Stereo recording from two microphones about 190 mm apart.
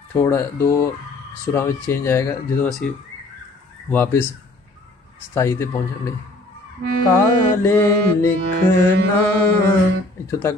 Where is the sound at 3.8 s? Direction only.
10° left (ahead or behind).